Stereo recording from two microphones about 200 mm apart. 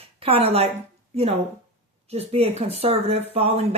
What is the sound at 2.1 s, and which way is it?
Speech, 30° right (ahead or behind).